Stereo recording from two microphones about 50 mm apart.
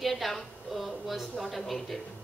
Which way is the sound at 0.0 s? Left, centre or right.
Centre.